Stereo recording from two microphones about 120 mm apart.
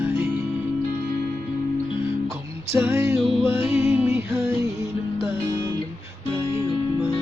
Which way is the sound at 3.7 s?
10° right (ahead or behind).